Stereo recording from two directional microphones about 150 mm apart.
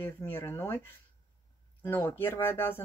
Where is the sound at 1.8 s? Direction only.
10° left (ahead or behind).